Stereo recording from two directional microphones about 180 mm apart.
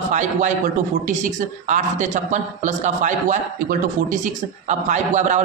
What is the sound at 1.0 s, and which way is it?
Speech, 45° right (ahead or behind).